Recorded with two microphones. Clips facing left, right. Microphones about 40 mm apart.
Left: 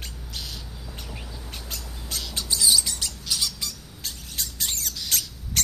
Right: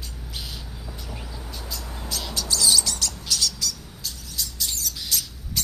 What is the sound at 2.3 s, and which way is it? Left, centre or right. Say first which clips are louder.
Bird: right 1 dB; centre.